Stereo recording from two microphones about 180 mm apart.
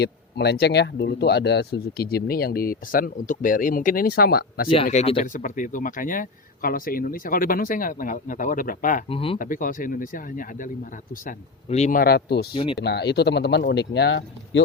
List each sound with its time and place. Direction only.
0.0 s speech: 65° left (ahead or behind)
4.9 s speech: 35° left (ahead or behind)
5.2 s speech: 45° left (ahead or behind)
9.0 s speech: 30° left (ahead or behind)
9.4 s speech: 50° left (ahead or behind); by 14.6 s 80° left